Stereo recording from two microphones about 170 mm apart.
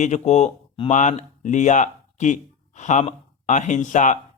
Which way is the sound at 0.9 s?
45° left (ahead or behind).